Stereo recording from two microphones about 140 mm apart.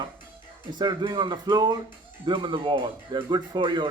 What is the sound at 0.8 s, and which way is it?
Speech, 30° right (ahead or behind).